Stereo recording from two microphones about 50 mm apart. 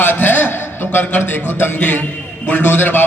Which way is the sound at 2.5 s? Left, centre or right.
Left.